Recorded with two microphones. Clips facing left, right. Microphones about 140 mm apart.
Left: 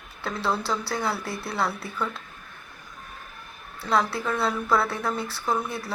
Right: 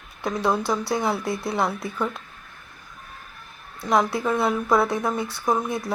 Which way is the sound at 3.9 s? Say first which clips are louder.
Right 3 dB; 15° right (ahead or behind).